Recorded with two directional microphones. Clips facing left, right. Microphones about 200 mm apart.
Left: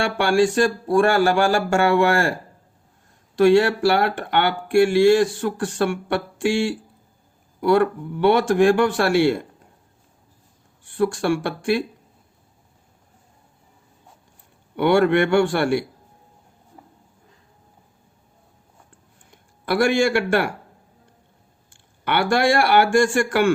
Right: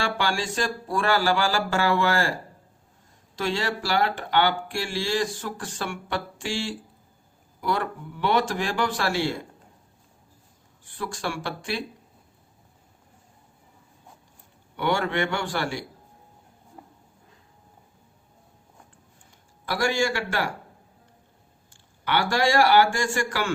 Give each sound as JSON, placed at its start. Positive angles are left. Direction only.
{"t": 0.0, "sound": "speech", "side_deg": 55}
{"t": 3.3, "sound": "speech", "side_deg": 60}
{"t": 10.9, "sound": "speech", "side_deg": 55}
{"t": 14.8, "sound": "speech", "side_deg": 60}
{"t": 19.6, "sound": "speech", "side_deg": 60}
{"t": 21.7, "sound": "speech", "side_deg": 60}